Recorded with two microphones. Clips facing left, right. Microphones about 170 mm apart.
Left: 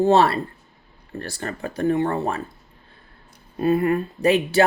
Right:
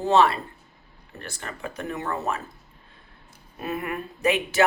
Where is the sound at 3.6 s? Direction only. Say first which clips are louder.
Left 11 dB; 30° left (ahead or behind).